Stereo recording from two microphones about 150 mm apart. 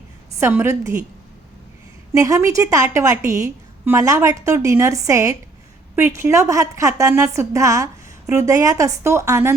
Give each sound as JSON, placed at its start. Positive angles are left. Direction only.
{"t": 0.3, "sound": "a woman's voice", "side_deg": -15}
{"t": 2.1, "sound": "a woman's voice", "side_deg": -20}